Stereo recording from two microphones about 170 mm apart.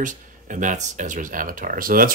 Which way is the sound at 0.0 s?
50° right (ahead or behind).